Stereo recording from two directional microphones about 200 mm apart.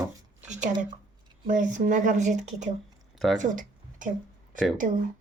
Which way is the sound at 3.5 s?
40° right (ahead or behind).